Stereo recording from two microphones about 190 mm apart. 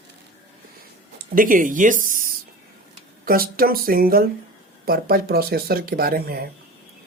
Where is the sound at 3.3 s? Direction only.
50° right (ahead or behind).